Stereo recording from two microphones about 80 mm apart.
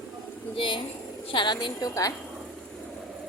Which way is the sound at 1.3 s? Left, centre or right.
Left.